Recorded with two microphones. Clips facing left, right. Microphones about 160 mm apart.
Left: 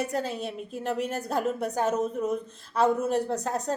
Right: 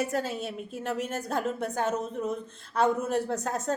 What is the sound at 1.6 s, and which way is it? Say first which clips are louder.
Speech: left 2 dB; 40° left (ahead or behind).